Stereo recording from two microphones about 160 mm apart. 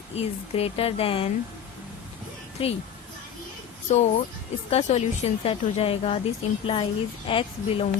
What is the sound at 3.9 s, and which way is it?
Speech, 45° left (ahead or behind).